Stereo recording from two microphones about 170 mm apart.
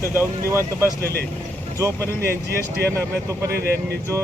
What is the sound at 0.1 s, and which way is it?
Speech, 15° right (ahead or behind).